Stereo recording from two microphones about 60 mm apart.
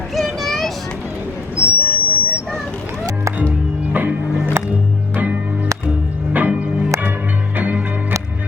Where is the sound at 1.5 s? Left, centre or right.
Right.